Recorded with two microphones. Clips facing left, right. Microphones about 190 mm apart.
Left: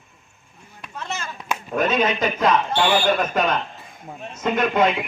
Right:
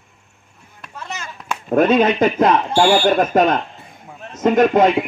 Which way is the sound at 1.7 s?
55° right (ahead or behind).